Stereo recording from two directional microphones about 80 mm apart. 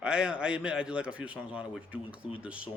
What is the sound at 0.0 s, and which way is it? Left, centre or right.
A man's voice, centre.